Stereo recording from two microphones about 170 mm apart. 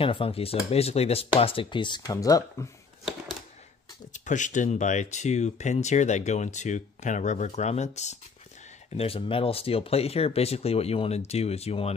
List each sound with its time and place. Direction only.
0.0 s speech: 30° left (ahead or behind)
4.1 s speech: 45° left (ahead or behind)